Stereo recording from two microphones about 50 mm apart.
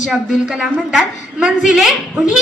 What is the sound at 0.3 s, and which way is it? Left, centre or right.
Speech, centre.